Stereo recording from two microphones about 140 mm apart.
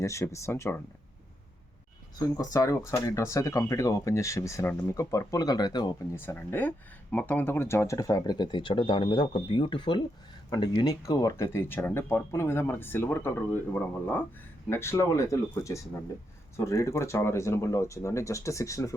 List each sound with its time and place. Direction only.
0.0 s speech: 20° left (ahead or behind)
2.1 s speech: 25° left (ahead or behind)
6.1 s speech: 15° left (ahead or behind)
14.7 s speech: 20° left (ahead or behind)